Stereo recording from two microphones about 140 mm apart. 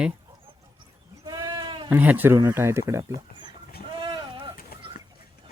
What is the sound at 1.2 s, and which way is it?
Sheep, 30° right (ahead or behind).